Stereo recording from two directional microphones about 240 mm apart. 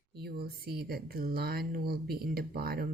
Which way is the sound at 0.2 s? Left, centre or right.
Right.